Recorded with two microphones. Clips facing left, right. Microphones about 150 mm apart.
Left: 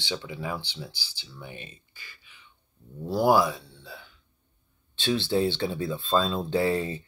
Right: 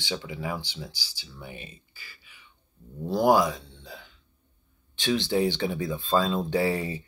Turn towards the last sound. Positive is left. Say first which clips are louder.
# left 1 dB
turn(degrees=-15)  # may be behind; listen again after turning